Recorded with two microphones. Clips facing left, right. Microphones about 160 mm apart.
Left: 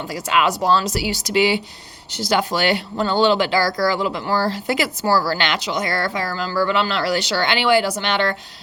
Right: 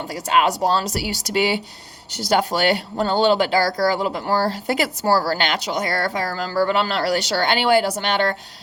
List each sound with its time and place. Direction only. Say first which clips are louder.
0.3 s speech: even; 35° right (ahead or behind)